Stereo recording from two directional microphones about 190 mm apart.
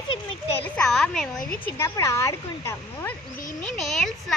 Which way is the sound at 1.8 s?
15° left (ahead or behind).